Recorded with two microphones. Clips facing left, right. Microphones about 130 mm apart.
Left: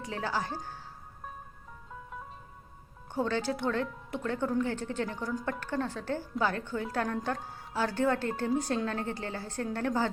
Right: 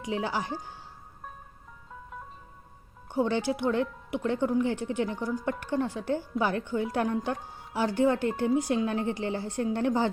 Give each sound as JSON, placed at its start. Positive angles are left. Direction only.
{"t": 0.0, "sound": "a woman's voice", "side_deg": -15}
{"t": 3.1, "sound": "a woman's voice", "side_deg": -15}